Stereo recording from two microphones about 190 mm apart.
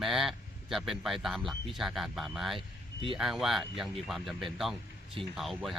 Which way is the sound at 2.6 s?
30° right (ahead or behind).